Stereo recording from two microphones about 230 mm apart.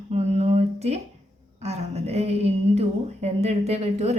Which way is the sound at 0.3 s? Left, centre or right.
Right.